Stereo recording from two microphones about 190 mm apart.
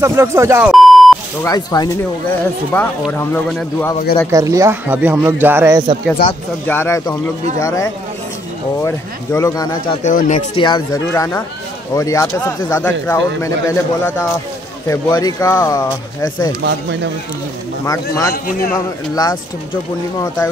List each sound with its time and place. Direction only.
0.0 s speech: 15° right (ahead or behind)
0.7 s beep: centre (ahead or behind)
1.4 s speech: 20° left (ahead or behind)
4.3 s speech: 15° right (ahead or behind)
6.2 s a man's voice: 50° left (ahead or behind)
6.7 s speech: 10° left (ahead or behind)
10.0 s speech: 40° left (ahead or behind)
10.6 s speech: 20° left (ahead or behind)
18.3 s a man's voice: 45° left (ahead or behind)
19.1 s speech: 20° left (ahead or behind)